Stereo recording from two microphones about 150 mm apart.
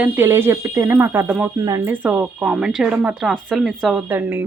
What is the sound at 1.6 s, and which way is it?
Speech, 25° right (ahead or behind).